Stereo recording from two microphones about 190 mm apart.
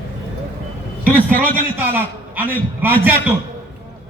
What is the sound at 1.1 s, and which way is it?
Speech, 10° left (ahead or behind).